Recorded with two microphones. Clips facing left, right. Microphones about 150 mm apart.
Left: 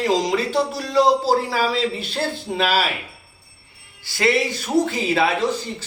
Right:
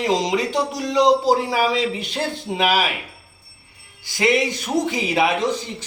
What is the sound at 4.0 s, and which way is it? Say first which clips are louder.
Speech: right 1 dB; 15° right (ahead or behind).